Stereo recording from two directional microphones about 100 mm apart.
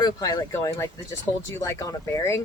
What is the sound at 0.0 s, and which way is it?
Speech, 40° left (ahead or behind).